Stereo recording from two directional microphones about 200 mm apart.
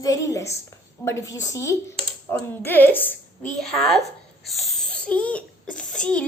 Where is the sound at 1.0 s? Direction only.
15° left (ahead or behind).